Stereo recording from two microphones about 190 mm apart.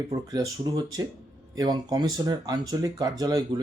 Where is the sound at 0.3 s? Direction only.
20° right (ahead or behind).